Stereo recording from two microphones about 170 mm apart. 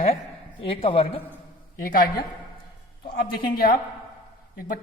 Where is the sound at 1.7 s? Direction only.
55° left (ahead or behind).